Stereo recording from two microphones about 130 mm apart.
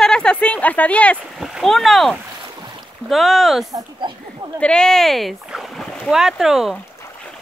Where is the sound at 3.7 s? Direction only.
35° right (ahead or behind).